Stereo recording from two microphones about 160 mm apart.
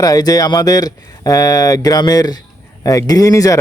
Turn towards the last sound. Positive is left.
turn(degrees=20)  # may be behind; listen again after turning